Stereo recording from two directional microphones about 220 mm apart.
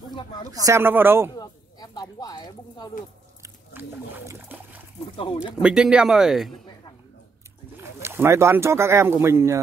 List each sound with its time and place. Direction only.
0.7 s speech: 10° right (ahead or behind)
1.3 s a sound: 20° left (ahead or behind)
3.4 s speech: 10° right (ahead or behind)
8.0 s speech: 10° right (ahead or behind)